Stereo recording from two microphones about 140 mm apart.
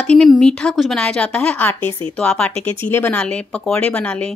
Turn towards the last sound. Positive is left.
turn(degrees=10)  # may be behind; listen again after turning